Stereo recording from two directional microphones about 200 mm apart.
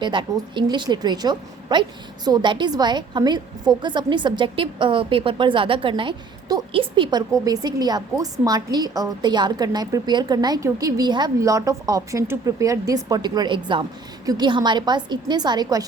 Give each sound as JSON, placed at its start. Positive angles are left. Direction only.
{"t": 0.0, "sound": "a woman's voice", "side_deg": -25}